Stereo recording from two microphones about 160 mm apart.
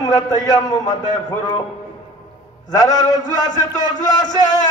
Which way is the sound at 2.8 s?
25° left (ahead or behind).